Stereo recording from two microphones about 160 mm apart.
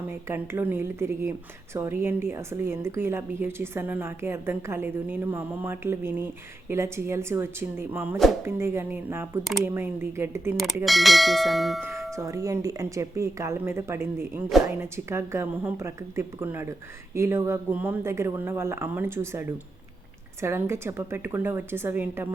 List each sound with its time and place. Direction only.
0.1 s a woman's voice: 15° right (ahead or behind)
10.8 s speech: centre (ahead or behind)
11.8 s a woman's voice: 15° right (ahead or behind)